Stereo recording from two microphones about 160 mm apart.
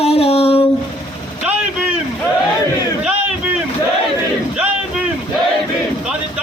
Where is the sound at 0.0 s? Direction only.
40° left (ahead or behind).